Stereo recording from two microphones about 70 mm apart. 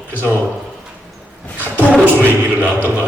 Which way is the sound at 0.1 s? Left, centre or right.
Right.